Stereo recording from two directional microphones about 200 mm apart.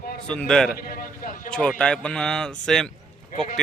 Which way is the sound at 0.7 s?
45° left (ahead or behind).